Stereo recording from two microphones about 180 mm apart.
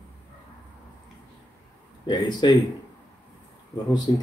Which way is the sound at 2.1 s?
25° left (ahead or behind).